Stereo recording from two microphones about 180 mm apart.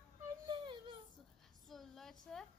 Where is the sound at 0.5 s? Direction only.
25° right (ahead or behind).